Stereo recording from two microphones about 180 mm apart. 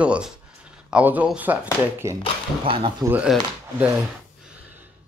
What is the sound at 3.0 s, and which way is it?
Speech, 5° right (ahead or behind).